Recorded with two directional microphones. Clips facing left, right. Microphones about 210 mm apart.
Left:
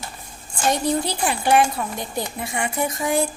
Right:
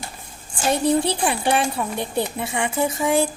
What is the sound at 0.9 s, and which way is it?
Speech, 30° right (ahead or behind).